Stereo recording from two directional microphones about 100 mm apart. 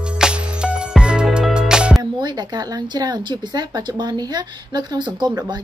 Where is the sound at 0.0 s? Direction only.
10° right (ahead or behind).